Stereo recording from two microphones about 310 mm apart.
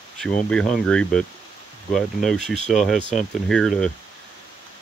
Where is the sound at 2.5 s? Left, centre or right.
Left.